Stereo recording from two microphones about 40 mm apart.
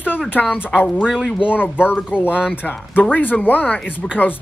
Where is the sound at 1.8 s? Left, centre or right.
Left.